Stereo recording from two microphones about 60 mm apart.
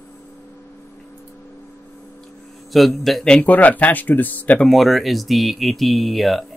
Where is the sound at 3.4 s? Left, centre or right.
Left.